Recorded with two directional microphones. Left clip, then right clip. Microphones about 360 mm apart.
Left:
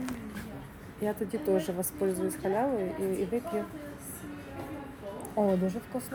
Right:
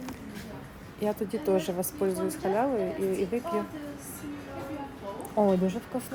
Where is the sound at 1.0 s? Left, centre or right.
Centre.